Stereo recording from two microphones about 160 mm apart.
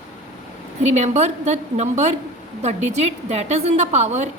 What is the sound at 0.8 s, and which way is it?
A woman's voice, 45° right (ahead or behind).